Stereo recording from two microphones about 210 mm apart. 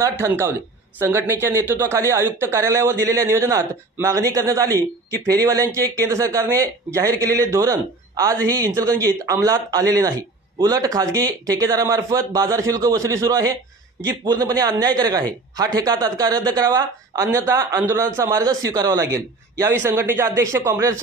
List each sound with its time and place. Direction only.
0.0 s a man's voice: 10° right (ahead or behind)